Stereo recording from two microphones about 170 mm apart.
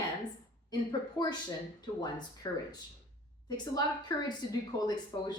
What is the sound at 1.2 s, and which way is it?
A woman's voice, 20° left (ahead or behind).